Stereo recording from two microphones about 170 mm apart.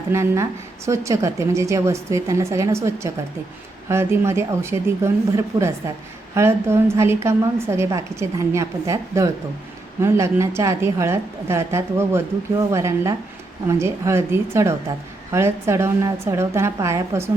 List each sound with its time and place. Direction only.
0.1 s a woman's voice: 15° right (ahead or behind)